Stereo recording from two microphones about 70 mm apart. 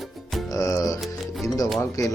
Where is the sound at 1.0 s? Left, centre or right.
Centre.